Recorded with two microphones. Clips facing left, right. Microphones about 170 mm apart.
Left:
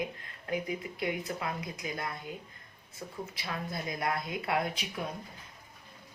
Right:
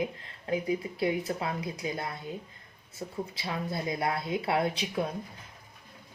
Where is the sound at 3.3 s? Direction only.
25° right (ahead or behind).